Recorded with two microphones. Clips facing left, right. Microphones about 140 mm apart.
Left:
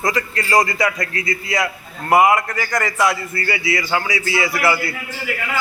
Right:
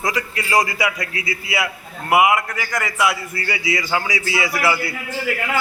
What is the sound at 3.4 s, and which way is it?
A man's voice, 20° right (ahead or behind).